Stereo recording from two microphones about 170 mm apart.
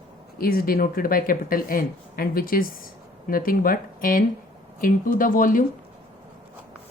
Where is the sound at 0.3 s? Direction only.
60° left (ahead or behind).